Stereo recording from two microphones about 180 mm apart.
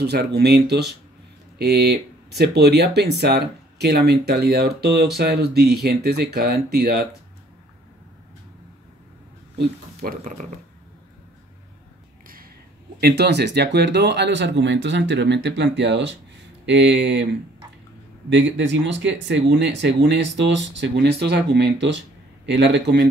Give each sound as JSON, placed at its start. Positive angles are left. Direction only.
{"t": 0.0, "sound": "speech", "side_deg": -65}
{"t": 9.6, "sound": "speech", "side_deg": -60}
{"t": 13.0, "sound": "speech", "side_deg": -65}